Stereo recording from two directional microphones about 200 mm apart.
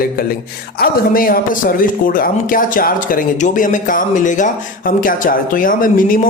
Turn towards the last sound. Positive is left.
turn(degrees=45)  # may be behind; listen again after turning